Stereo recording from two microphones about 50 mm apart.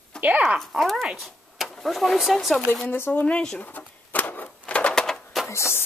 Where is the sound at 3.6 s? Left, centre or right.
Left.